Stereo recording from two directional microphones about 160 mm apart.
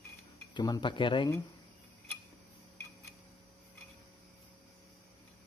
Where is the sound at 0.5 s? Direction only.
25° left (ahead or behind).